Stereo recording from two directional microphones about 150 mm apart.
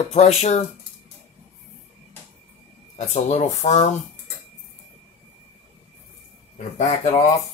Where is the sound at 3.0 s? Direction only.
50° left (ahead or behind).